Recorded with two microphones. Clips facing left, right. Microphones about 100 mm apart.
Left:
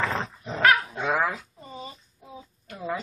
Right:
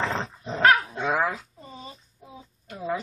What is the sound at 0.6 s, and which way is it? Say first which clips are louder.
Dog: right 1 dB; 30° right (ahead or behind).